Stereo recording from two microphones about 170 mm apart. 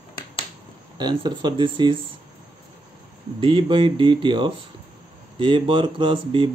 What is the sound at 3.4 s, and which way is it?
Speech, 30° right (ahead or behind).